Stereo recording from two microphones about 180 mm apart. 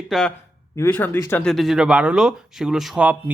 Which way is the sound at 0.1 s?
5° left (ahead or behind).